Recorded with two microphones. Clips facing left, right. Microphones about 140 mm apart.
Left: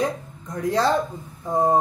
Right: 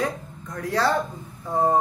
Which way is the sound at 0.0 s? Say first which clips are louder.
Left 2 dB; 20° left (ahead or behind).